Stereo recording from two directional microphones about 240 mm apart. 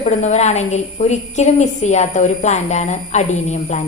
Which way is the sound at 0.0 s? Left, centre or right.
Left.